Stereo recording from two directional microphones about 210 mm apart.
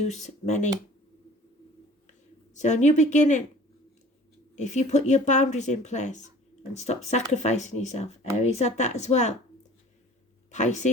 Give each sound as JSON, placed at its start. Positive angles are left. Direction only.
{"t": 0.0, "sound": "speech", "side_deg": 35}
{"t": 2.6, "sound": "speech", "side_deg": 35}
{"t": 4.5, "sound": "speech", "side_deg": 35}
{"t": 10.5, "sound": "speech", "side_deg": 35}